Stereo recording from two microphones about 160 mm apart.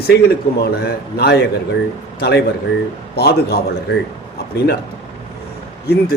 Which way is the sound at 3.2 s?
85° left.